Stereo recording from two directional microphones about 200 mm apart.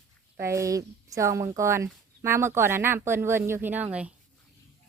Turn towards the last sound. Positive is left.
turn(degrees=-5)  # may be behind; listen again after turning